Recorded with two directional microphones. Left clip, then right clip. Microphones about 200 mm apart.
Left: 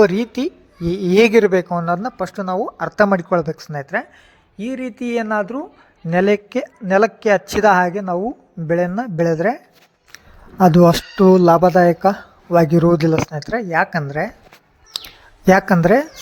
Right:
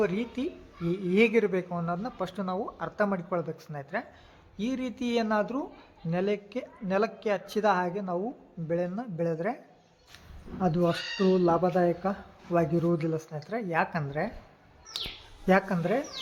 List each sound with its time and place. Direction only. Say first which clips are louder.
0.0 s a woman's voice: left 14 dB; 50° left (ahead or behind)
4.5 s speech: left 7 dB; 25° left (ahead or behind); by 9.6 s 45° left (ahead or behind)
10.6 s a woman's voice: left 16 dB; 55° left (ahead or behind); by 14.3 s 40° left (ahead or behind)
14.9 s bird: left 6 dB; 45° left (ahead or behind)
15.4 s a woman's voice: left 13 dB; 50° left (ahead or behind)